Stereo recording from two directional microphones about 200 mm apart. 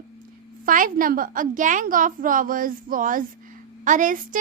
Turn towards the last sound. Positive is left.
turn(degrees=-40)  # may be behind; listen again after turning